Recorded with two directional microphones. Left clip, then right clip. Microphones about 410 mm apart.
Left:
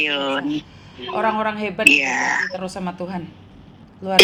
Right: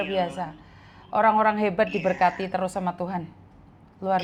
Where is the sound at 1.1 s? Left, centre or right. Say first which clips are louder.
Right 1 dB; right.